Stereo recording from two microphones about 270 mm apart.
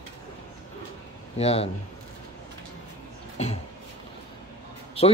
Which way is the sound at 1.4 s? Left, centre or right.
Left.